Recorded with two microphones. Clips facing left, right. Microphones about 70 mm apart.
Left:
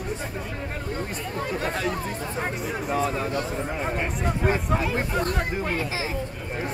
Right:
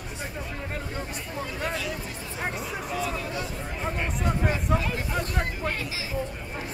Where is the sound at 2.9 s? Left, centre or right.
Left.